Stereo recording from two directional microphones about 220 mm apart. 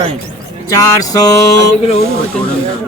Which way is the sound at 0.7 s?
15° left (ahead or behind).